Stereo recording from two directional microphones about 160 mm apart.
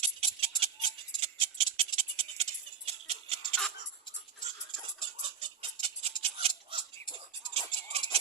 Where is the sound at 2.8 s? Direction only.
40° right (ahead or behind).